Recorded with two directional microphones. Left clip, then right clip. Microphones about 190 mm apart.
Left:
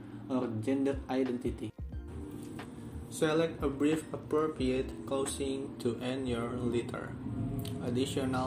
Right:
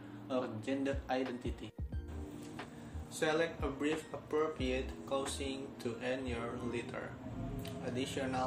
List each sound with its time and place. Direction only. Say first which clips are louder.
0.3 s speech: left 4 dB; 15° left (ahead or behind)
3.2 s speech: left 4 dB; 20° left (ahead or behind)